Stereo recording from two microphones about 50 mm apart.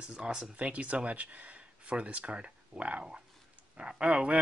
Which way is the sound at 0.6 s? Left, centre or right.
Right.